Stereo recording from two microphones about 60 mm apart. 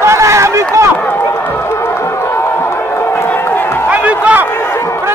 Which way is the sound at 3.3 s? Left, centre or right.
Left.